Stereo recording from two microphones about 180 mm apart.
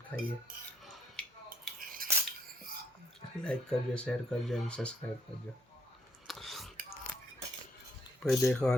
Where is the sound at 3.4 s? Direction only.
5° left (ahead or behind).